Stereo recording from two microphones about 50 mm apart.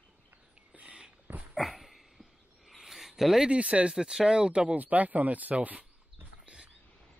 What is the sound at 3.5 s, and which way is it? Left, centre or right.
Speech, right.